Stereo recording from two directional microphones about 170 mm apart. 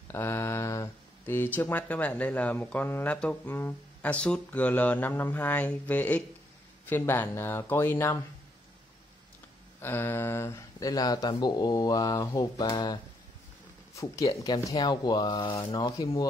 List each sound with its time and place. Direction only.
0.1 s speech: 15° left (ahead or behind)
9.8 s speech: 15° left (ahead or behind)